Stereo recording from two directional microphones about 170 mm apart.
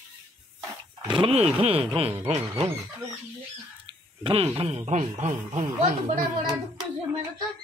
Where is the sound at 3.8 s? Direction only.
30° right (ahead or behind).